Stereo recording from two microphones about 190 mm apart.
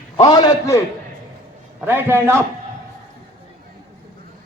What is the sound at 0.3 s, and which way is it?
Speech, 20° left (ahead or behind).